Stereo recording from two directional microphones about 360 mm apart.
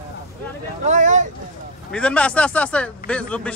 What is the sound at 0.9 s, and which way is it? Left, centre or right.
Speech, centre.